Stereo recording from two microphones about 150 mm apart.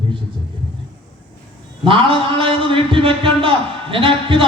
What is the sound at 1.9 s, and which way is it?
A man's voice, 35° right (ahead or behind).